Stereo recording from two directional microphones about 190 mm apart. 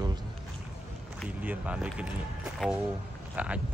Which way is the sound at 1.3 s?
5° right (ahead or behind).